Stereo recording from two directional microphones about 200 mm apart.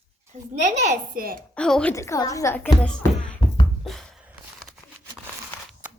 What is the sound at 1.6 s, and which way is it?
Speech, 5° left (ahead or behind).